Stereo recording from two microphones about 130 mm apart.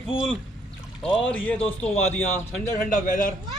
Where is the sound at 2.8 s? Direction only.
90° left.